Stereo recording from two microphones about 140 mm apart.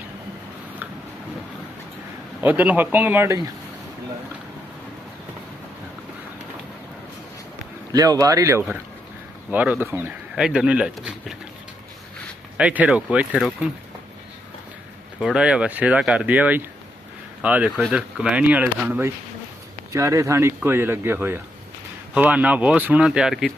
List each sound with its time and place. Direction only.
2.4 s speech: 10° right (ahead or behind)
7.9 s speech: 25° right (ahead or behind)
9.5 s speech: 10° right (ahead or behind)
12.5 s speech: 10° right (ahead or behind)
15.2 s speech: 5° right (ahead or behind)